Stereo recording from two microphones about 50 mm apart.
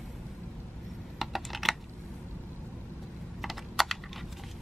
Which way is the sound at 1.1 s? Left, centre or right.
Centre.